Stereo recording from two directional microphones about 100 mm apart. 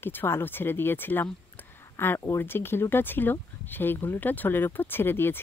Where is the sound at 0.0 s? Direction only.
20° left (ahead or behind).